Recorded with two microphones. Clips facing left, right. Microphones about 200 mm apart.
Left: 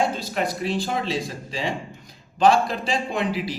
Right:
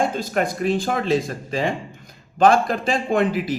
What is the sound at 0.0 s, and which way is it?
A man's voice, 50° right (ahead or behind).